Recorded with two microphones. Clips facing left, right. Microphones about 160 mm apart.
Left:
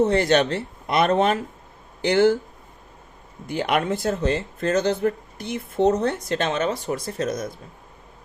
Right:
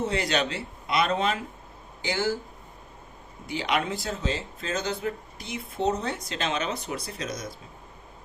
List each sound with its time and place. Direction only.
0.0 s speech: 55° left (ahead or behind)
3.5 s speech: 50° left (ahead or behind)